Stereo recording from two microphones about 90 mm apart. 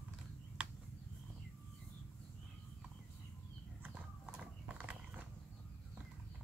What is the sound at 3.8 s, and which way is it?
Horse, 15° right (ahead or behind).